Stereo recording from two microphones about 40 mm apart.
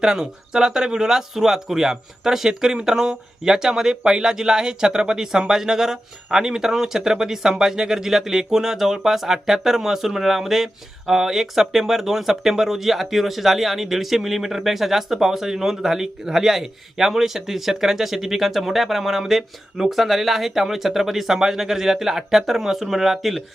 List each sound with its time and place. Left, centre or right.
0.0 s speech: centre